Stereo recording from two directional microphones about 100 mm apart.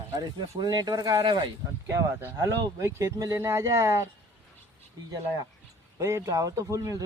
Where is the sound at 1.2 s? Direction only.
50° right (ahead or behind).